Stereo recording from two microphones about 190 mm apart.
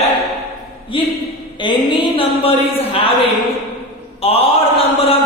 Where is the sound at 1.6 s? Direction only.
25° left (ahead or behind).